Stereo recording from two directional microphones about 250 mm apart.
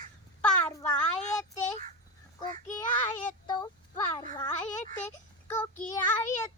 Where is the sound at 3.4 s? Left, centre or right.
Centre.